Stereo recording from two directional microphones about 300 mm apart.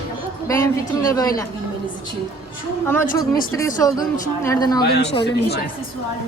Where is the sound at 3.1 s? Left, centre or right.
Left.